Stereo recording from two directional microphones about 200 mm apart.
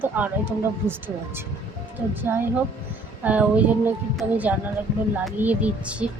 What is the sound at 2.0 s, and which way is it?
Speech, 10° right (ahead or behind).